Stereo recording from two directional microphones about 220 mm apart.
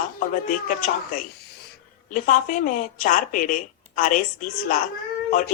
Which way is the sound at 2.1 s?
35° left (ahead or behind).